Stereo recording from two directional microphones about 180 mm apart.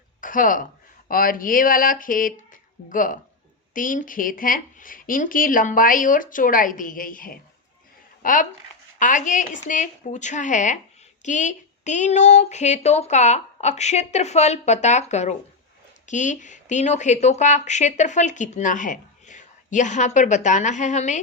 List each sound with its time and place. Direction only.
0.2 s speech: 50° left (ahead or behind)